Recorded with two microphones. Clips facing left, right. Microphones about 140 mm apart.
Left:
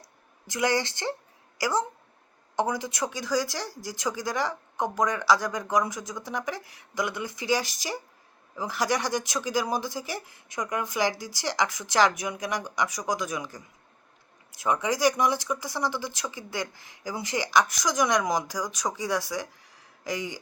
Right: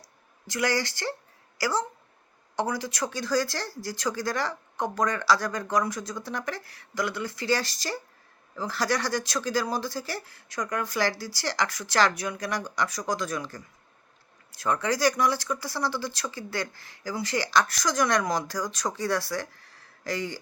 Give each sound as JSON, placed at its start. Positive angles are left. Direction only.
{"t": 0.4, "sound": "a woman's voice", "side_deg": 20}